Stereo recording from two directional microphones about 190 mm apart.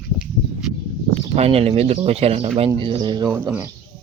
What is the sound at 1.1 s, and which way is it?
Speech, 35° right (ahead or behind).